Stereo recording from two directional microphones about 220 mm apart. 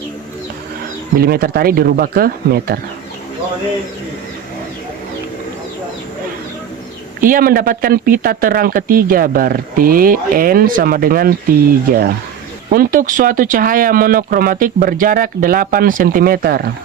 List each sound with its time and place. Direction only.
1.2 s speech: 45° right (ahead or behind)
7.2 s speech: 40° right (ahead or behind)
12.7 s speech: 40° right (ahead or behind)